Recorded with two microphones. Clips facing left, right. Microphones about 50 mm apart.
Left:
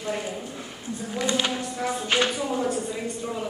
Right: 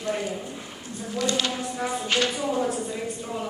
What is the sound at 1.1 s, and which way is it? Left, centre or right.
Speech, left.